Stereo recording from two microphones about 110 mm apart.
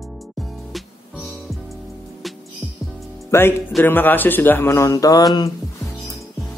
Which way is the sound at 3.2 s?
20° left (ahead or behind).